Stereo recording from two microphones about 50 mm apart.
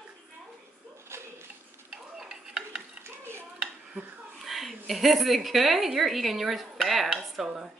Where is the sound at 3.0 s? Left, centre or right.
Right.